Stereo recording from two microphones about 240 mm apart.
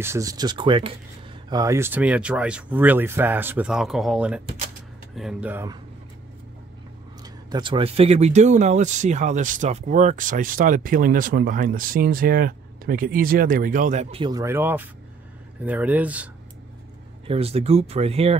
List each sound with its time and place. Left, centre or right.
0.0 s speech: centre
7.4 s speech: centre
17.3 s speech: right